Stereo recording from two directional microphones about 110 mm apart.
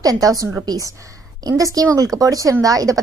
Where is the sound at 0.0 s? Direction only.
35° right (ahead or behind).